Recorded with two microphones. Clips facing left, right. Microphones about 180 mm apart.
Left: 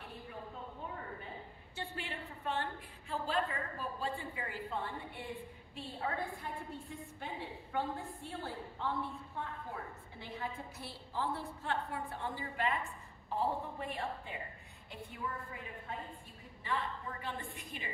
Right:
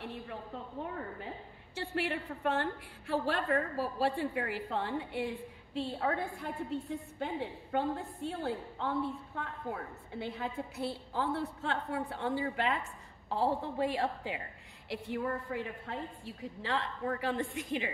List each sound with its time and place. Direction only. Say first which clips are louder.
1.8 s a woman's voice: right 9 dB; 85° right
5.8 s a woman's voice: right 6 dB; 70° right (ahead or behind)
7.7 s a woman's voice: right 4 dB; 60° right (ahead or behind); by 14.4 s 90° right
14.9 s a woman's voice: right 9 dB; 80° right